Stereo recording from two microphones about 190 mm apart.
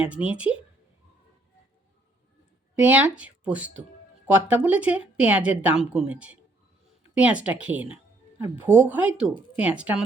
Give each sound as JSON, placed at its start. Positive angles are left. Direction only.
{"t": 0.0, "sound": "speech", "side_deg": -5}
{"t": 2.7, "sound": "speech", "side_deg": -10}